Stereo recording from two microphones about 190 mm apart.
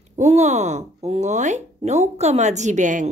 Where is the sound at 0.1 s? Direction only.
35° right (ahead or behind).